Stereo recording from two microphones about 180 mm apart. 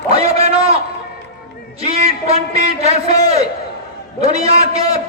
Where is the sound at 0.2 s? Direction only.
35° right (ahead or behind).